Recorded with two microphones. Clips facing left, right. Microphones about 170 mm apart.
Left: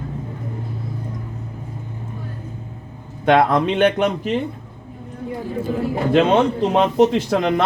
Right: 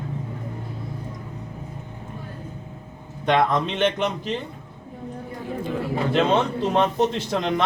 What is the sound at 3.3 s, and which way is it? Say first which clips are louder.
Speech: left 5 dB; 60° left (ahead or behind).